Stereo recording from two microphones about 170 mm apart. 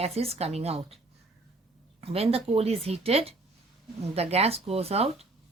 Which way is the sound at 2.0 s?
35° right (ahead or behind).